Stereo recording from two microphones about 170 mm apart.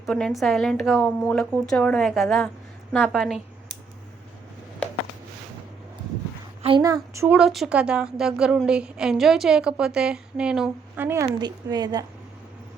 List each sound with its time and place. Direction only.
0.0 s a woman's voice: 5° left (ahead or behind)
6.6 s a woman's voice: 30° right (ahead or behind)
7.3 s a woman's voice: centre (ahead or behind)
11.3 s a woman's voice: 25° right (ahead or behind)